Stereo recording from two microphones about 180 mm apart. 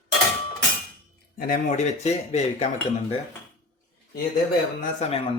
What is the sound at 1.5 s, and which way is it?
Speech, 40° left (ahead or behind).